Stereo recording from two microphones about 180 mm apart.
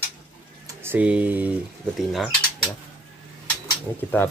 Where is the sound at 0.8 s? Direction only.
10° right (ahead or behind).